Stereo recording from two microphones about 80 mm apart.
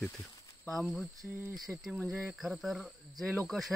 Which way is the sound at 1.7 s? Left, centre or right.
Right.